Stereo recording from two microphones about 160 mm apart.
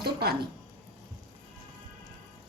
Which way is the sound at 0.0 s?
80° right.